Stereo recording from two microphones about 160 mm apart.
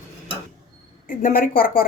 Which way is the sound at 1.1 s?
55° left (ahead or behind).